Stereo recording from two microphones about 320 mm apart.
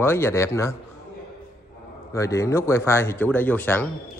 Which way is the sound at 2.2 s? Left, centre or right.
Centre.